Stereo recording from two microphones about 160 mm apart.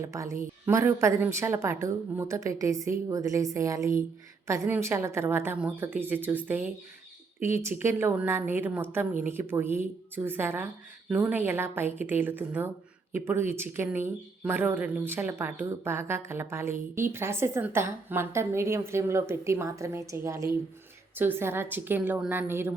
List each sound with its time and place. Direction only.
0.0 s a woman's voice: 20° right (ahead or behind)